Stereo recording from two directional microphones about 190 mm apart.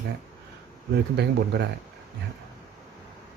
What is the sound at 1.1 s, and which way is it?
Speech, 65° right (ahead or behind).